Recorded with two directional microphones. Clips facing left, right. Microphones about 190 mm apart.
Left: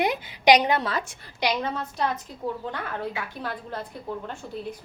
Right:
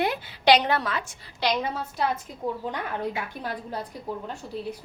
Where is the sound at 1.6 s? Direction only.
10° right (ahead or behind).